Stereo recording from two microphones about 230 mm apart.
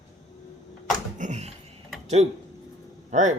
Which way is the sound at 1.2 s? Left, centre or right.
Right.